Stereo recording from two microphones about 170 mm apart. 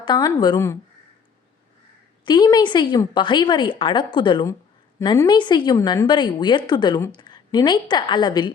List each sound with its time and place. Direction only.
0.0 s a woman's voice: 25° left (ahead or behind)
2.2 s a woman's voice: 25° left (ahead or behind)